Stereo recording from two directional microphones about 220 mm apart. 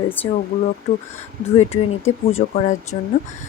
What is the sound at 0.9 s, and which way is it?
Speech, 35° left (ahead or behind).